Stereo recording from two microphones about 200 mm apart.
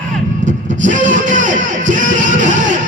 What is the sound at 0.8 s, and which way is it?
Music, 40° right (ahead or behind).